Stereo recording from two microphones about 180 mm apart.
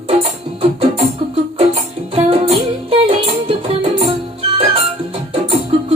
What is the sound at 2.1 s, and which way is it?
Music, 35° right (ahead or behind).